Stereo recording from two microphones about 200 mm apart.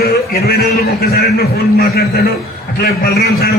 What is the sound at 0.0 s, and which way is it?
A man's voice, 50° left (ahead or behind).